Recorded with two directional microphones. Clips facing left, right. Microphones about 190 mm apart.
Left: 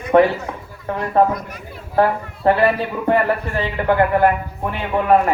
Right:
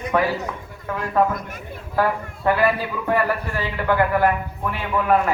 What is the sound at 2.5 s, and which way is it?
Speech, 30° left (ahead or behind).